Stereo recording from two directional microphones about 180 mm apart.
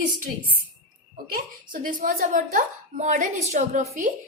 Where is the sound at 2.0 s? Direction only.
50° right (ahead or behind).